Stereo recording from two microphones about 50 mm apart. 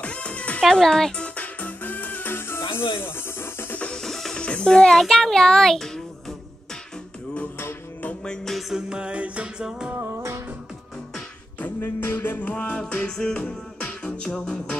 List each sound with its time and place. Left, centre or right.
0.0 s music: left
0.6 s a child's voice: centre
1.1 s music: left
3.9 s music: centre
4.4 s a child's voice: centre
8.5 s music: centre
8.8 s music: centre
9.9 s music: right
11.6 s music: left; by 14.8 s centre